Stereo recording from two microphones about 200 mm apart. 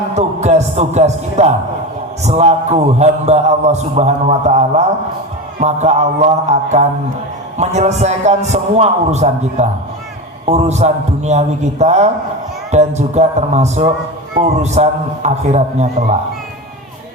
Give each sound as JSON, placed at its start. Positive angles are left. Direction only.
{"t": 0.2, "sound": "a man's voice", "side_deg": -35}